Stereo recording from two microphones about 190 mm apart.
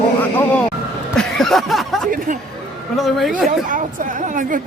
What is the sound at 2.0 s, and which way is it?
Speech, 45° right (ahead or behind).